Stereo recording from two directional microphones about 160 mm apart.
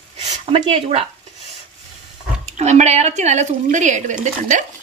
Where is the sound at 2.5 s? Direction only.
45° right (ahead or behind).